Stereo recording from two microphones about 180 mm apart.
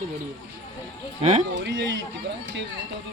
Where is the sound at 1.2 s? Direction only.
35° right (ahead or behind).